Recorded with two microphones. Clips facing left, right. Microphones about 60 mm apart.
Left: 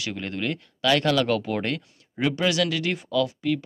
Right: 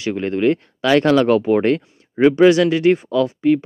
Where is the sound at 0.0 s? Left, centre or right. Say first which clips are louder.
Right 11 dB; right.